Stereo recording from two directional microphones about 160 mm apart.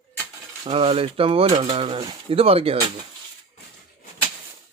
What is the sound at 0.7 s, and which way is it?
Speech, 35° right (ahead or behind).